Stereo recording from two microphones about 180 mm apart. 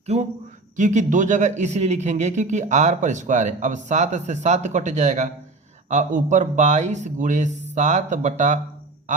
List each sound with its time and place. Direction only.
0.0 s a man's voice: 35° right (ahead or behind)